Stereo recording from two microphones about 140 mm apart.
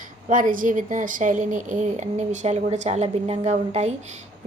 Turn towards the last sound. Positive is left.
turn(degrees=-55)  # may be behind; listen again after turning